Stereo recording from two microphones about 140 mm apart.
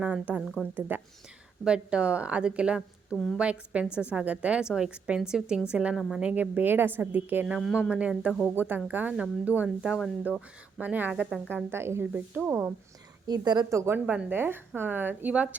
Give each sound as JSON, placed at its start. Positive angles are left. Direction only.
{"t": 0.0, "sound": "a woman's voice", "side_deg": -10}
{"t": 7.4, "sound": "a woman's voice", "side_deg": 0}
{"t": 7.9, "sound": "a woman's voice", "side_deg": -10}
{"t": 13.2, "sound": "a woman's voice", "side_deg": -30}